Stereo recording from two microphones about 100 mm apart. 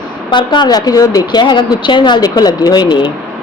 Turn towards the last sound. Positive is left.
turn(degrees=45)  # may be behind; listen again after turning